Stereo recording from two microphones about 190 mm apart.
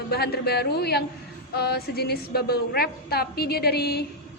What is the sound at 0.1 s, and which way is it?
A woman's voice, 55° left (ahead or behind).